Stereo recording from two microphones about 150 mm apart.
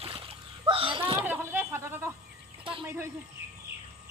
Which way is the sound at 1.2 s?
15° right (ahead or behind).